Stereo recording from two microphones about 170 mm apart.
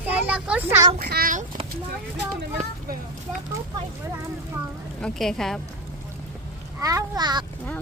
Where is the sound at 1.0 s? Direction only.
65° right (ahead or behind).